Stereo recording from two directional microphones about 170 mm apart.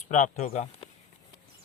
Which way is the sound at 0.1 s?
45° left (ahead or behind).